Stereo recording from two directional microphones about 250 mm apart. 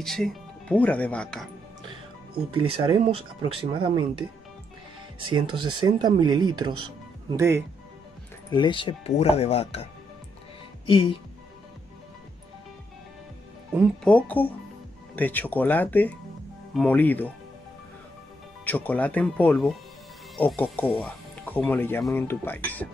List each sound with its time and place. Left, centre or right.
0.0 s speech: centre
2.5 s speech: right
5.3 s speech: centre
8.5 s speech: centre
10.9 s speech: left
13.7 s speech: centre
18.6 s speech: centre